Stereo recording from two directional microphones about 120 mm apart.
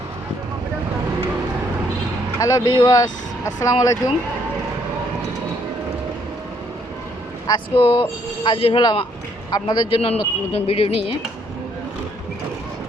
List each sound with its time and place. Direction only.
2.4 s speech: 35° left (ahead or behind)
7.4 s speech: 45° left (ahead or behind)